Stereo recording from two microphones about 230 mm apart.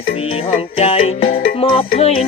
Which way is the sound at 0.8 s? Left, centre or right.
Left.